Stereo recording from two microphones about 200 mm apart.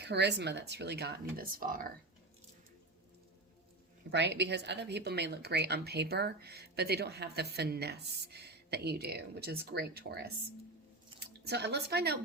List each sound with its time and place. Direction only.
0.0 s a woman's voice: 60° right (ahead or behind)
4.1 s a woman's voice: 60° right (ahead or behind)